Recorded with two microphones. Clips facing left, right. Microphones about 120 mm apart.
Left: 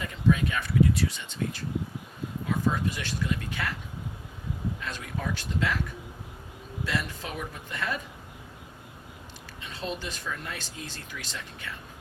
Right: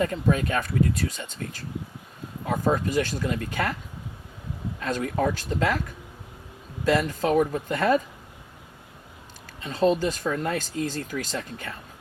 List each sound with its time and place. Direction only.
0.0 s speech: 45° right (ahead or behind)
4.8 s speech: 40° right (ahead or behind)
6.8 s speech: 40° right (ahead or behind)
9.6 s speech: 40° right (ahead or behind)